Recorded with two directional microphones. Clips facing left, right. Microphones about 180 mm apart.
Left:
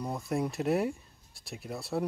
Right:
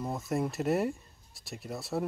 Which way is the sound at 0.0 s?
Centre (ahead or behind).